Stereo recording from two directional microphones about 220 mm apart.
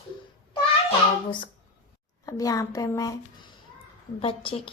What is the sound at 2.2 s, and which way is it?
Speech, 15° left (ahead or behind).